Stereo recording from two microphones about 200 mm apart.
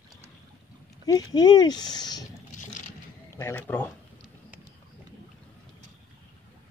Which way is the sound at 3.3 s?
10° left (ahead or behind).